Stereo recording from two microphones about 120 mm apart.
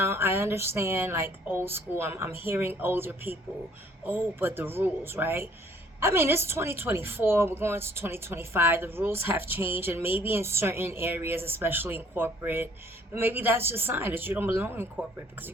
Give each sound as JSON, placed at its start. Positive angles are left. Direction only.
{"t": 0.0, "sound": "a woman's voice", "side_deg": -20}